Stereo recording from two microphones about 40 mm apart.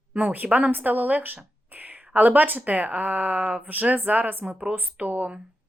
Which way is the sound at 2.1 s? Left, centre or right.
Right.